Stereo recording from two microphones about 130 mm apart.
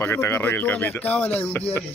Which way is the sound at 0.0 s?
20° left (ahead or behind).